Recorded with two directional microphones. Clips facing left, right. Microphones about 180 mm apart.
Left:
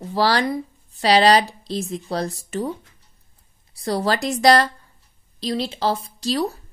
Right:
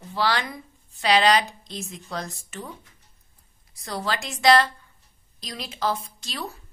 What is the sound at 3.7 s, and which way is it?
A woman's voice, 35° left (ahead or behind).